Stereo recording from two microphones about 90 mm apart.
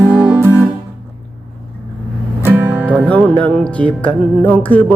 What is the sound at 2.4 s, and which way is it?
Music, 25° right (ahead or behind).